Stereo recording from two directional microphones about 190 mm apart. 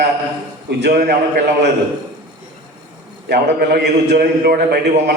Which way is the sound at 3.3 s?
60° right (ahead or behind).